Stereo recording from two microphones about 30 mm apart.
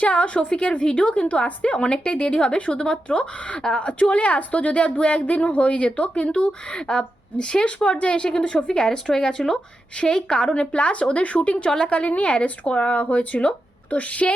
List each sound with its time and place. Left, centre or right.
0.0 s speech: left
1.7 s speech: left
3.2 s speech: left
6.7 s speech: left
7.9 s speech: left
8.1 s speech: left
12.9 s speech: left